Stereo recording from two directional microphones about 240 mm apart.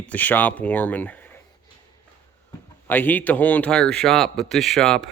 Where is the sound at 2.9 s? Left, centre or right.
Centre.